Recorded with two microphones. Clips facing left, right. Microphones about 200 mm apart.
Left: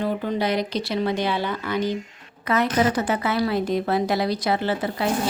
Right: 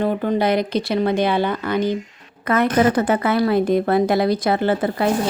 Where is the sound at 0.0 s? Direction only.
55° right (ahead or behind).